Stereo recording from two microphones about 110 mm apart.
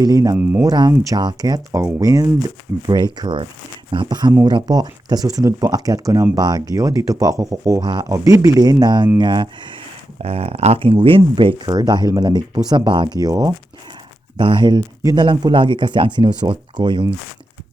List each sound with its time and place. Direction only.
0.0 s speech: 30° right (ahead or behind)
7.8 s speech: 40° right (ahead or behind)
8.1 s speech: 30° right (ahead or behind)
10.2 s speech: 65° right (ahead or behind); by 13.5 s 35° right (ahead or behind)
14.3 s speech: 45° right (ahead or behind)